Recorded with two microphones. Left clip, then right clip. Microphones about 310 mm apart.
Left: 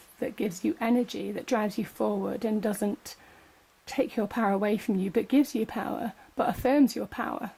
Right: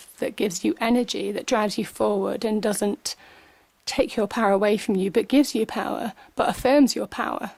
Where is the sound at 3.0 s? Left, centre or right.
Centre.